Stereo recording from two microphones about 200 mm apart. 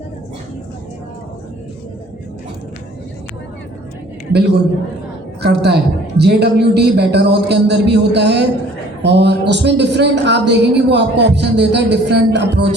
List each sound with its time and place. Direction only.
4.3 s a man's voice: 55° right (ahead or behind)